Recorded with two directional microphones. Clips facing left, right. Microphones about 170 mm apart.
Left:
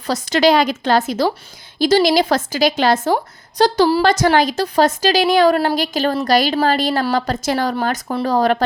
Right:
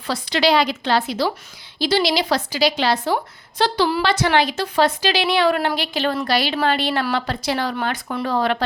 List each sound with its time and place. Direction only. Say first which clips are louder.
0.1 s a woman's voice: left 4 dB; 45° left (ahead or behind)